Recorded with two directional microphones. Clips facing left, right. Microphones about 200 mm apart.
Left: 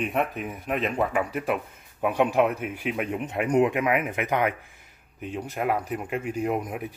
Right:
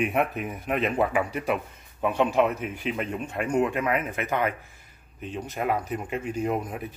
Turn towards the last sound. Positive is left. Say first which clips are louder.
# left 1 dB
turn(degrees=10)  # may be behind; listen again after turning